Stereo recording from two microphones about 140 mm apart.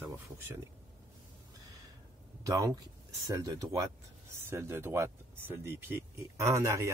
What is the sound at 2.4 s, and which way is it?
Speech, 25° right (ahead or behind).